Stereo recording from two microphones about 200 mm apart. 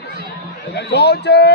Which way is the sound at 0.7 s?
55° left (ahead or behind).